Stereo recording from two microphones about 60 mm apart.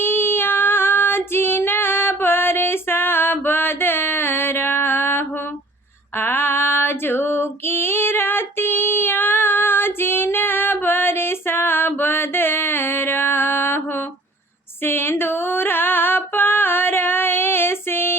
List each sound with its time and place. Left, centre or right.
0.0 s child singing: left
6.1 s female singing: left
14.8 s a sound: left